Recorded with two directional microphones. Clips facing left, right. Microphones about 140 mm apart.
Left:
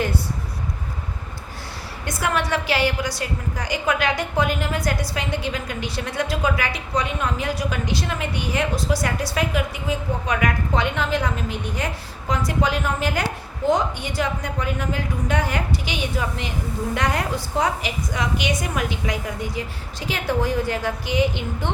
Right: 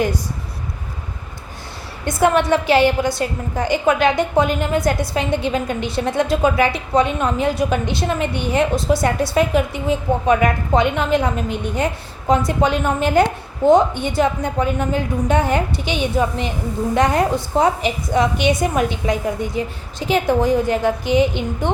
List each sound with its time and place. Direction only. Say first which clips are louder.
2.0 s a woman's voice: right 8 dB; 25° right (ahead or behind)